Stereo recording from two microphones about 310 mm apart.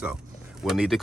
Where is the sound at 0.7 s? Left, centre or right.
Centre.